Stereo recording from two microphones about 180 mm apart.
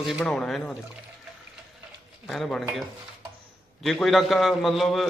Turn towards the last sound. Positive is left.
turn(degrees=0)  # may be behind; listen again after turning